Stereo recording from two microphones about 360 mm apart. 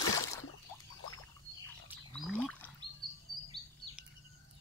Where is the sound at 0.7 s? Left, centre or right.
Centre.